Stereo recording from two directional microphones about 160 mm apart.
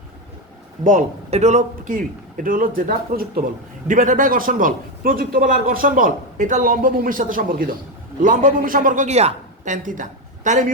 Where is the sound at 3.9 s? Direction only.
55° right (ahead or behind).